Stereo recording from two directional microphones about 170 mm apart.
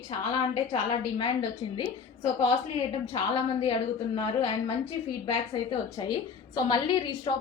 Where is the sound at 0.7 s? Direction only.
30° left (ahead or behind).